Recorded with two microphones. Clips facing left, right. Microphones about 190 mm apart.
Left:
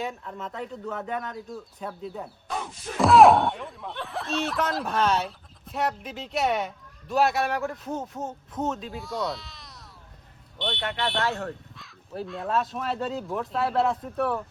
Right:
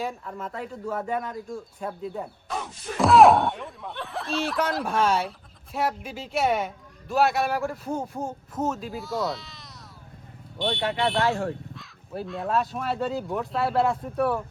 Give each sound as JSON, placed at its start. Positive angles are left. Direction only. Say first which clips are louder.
{"t": 0.0, "sound": "speech", "louder": "right 1 dB", "side_deg": 0}
{"t": 10.6, "sound": "speech", "louder": "right 4 dB", "side_deg": -45}
{"t": 11.7, "sound": "speech", "louder": "right 2 dB", "side_deg": 0}